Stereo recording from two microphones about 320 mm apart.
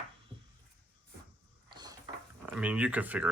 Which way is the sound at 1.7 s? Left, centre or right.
Centre.